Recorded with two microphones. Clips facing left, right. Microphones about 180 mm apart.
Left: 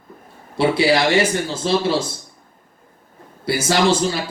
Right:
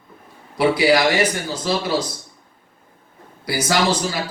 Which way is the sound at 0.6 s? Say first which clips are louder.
Even; 25° left (ahead or behind).